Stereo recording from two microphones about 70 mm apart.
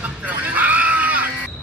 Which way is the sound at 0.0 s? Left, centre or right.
Right.